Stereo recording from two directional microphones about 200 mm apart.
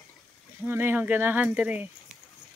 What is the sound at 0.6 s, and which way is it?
Speech, 10° right (ahead or behind).